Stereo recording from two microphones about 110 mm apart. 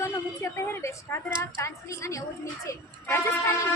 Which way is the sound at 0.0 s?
25° left (ahead or behind).